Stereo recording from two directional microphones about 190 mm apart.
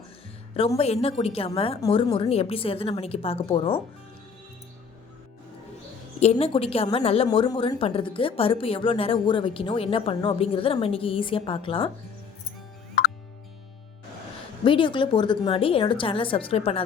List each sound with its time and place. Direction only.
0.6 s a woman's voice: 30° left (ahead or behind)
6.3 s a woman's voice: 30° left (ahead or behind)
14.6 s a woman's voice: 25° left (ahead or behind)